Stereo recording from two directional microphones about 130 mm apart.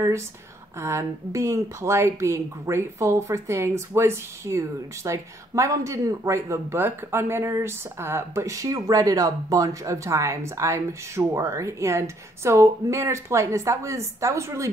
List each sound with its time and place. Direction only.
0.7 s a woman's voice: 20° right (ahead or behind)